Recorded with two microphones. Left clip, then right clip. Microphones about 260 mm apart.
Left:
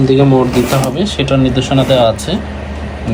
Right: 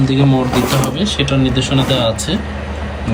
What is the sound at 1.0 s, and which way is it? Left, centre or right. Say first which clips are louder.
Speech: left 3 dB; centre.